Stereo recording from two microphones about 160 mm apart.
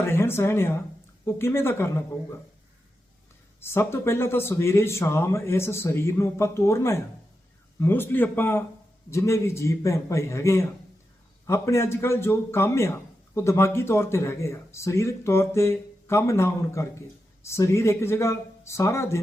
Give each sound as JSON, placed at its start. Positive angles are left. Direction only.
{"t": 0.0, "sound": "a man's voice", "side_deg": 15}
{"t": 3.6, "sound": "a man's voice", "side_deg": 15}